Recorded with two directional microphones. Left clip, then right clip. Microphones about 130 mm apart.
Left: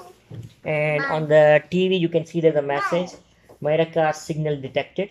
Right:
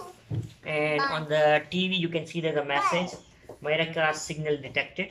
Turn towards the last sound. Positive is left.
turn(degrees=55)  # may be behind; listen again after turning